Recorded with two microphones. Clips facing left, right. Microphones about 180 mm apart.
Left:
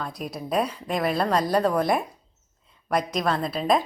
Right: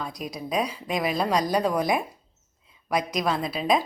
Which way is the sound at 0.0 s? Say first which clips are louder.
Left 1 dB; centre (ahead or behind).